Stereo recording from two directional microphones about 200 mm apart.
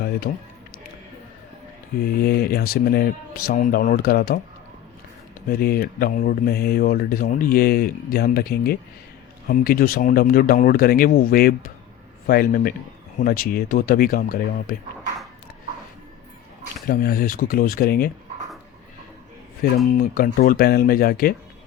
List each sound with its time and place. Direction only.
0.3 s speech: 45° left (ahead or behind)
2.0 s speech: 50° left (ahead or behind)
5.5 s speech: 50° left (ahead or behind)
16.9 s speech: 50° left (ahead or behind)
19.6 s speech: 50° left (ahead or behind)